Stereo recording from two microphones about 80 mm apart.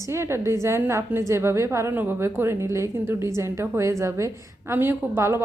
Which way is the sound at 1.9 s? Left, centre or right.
Right.